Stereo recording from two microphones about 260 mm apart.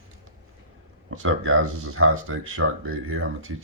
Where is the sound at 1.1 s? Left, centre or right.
Right.